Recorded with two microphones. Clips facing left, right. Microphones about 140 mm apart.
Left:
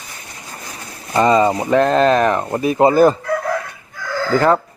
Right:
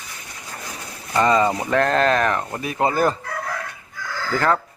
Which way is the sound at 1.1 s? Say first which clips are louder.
Left 4 dB; 25° left (ahead or behind).